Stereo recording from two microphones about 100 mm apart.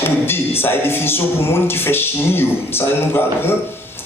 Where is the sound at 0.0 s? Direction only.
25° left (ahead or behind).